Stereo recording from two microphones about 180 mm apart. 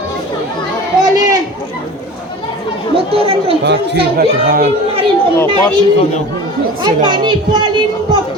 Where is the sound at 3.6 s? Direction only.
70° right (ahead or behind).